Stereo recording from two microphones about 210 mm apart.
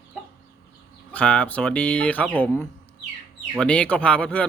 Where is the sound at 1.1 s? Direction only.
5° left (ahead or behind).